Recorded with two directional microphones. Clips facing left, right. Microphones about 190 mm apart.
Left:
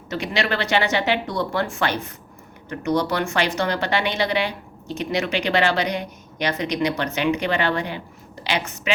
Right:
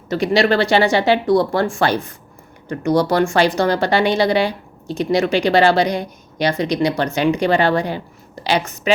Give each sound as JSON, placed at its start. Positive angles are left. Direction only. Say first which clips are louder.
{"t": 0.1, "sound": "speech", "louder": "right 9 dB", "side_deg": -35}